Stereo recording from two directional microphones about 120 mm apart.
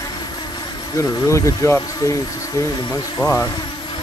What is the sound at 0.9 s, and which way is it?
Speech, 25° left (ahead or behind).